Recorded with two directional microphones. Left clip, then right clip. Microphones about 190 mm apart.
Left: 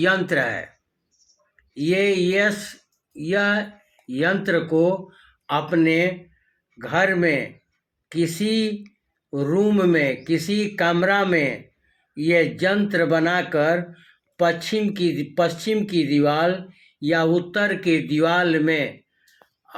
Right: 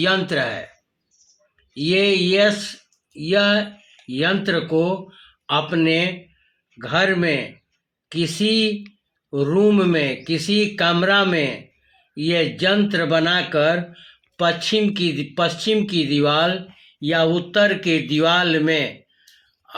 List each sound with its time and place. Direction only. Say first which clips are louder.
0.0 s speech: even; 35° right (ahead or behind)
1.7 s speech: right 2 dB; 40° right (ahead or behind)